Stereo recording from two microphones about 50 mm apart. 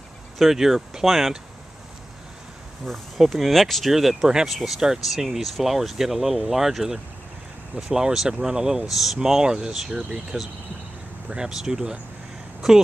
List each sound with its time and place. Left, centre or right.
0.4 s speech: centre
2.8 s speech: centre
4.5 s speech: centre
4.7 s speech: centre
11.2 s speech: centre